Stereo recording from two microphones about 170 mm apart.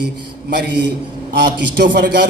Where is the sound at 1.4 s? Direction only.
85° right.